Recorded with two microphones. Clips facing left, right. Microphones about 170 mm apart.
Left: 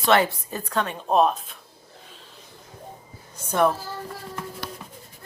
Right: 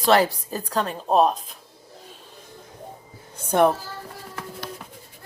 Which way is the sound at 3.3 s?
55° right (ahead or behind).